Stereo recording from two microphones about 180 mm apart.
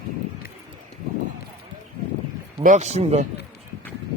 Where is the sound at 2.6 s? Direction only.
40° right (ahead or behind).